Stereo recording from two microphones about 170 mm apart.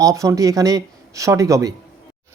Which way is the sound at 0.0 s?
20° right (ahead or behind).